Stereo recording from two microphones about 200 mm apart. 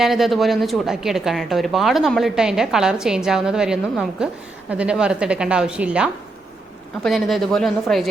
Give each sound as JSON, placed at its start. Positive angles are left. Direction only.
{"t": 0.0, "sound": "a woman's voice", "side_deg": 0}